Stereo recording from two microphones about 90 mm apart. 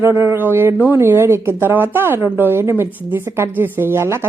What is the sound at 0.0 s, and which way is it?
A woman's voice, 30° right (ahead or behind).